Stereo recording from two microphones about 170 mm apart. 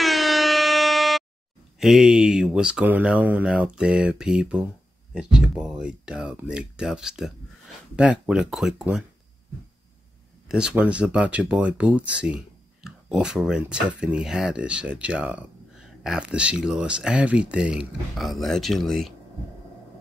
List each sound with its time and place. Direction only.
0.0 s air horn: centre (ahead or behind)
1.8 s speech: centre (ahead or behind)
10.5 s speech: 5° right (ahead or behind)